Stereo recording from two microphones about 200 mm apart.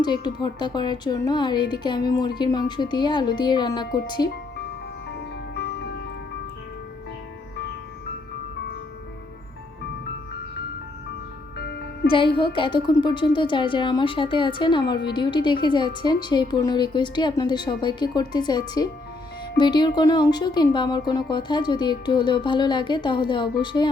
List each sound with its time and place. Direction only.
0.0 s speech: 20° left (ahead or behind)
5.1 s music: 55° left (ahead or behind)
11.5 s music: 55° left (ahead or behind)
12.5 s speech: 25° left (ahead or behind)